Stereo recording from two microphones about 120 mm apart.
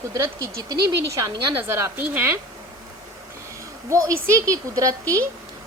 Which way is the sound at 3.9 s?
25° right (ahead or behind).